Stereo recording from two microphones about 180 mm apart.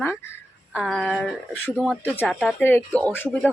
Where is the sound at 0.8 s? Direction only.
Centre (ahead or behind).